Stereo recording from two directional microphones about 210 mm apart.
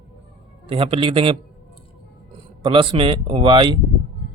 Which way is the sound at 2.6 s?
25° right (ahead or behind).